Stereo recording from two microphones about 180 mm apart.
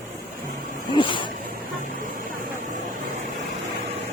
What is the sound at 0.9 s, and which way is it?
Snake, 25° left (ahead or behind).